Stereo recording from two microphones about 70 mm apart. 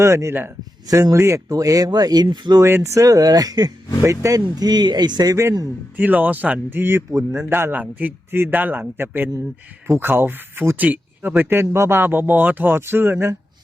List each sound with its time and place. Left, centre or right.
0.0 s speech: right
2.6 s speech: right
4.0 s speech: right
6.0 s a man's voice: right